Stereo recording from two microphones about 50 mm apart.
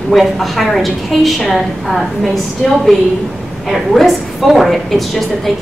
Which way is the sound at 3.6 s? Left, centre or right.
Centre.